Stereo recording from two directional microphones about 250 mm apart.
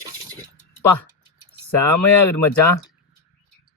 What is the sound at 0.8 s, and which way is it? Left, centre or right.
Speech, centre.